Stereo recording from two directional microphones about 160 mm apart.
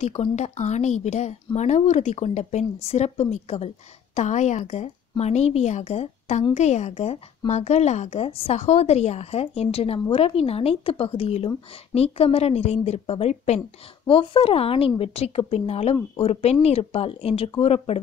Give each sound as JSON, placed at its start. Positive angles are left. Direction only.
{"t": 0.0, "sound": "speech", "side_deg": 40}